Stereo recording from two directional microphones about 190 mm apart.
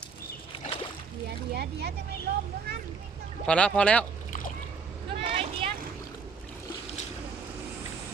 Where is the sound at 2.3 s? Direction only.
55° right (ahead or behind).